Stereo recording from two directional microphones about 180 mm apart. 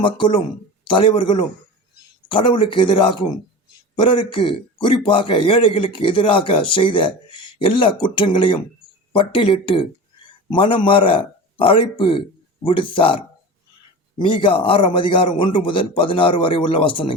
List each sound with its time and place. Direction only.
0.0 s a man's voice: 25° left (ahead or behind)
14.3 s a man's voice: 30° left (ahead or behind)